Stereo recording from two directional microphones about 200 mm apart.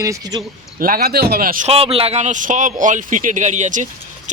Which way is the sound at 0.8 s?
45° right (ahead or behind).